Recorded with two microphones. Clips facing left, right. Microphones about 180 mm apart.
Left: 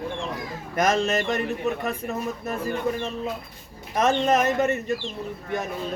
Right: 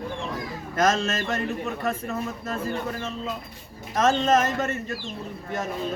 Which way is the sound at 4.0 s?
15° left (ahead or behind).